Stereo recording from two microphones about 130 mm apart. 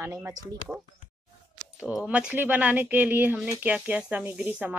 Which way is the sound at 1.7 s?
5° right (ahead or behind).